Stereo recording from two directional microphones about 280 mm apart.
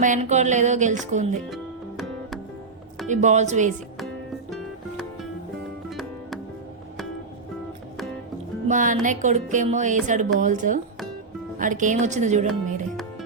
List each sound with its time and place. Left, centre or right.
0.0 s music: right
1.5 s music: centre
3.1 s music: right
8.6 s music: right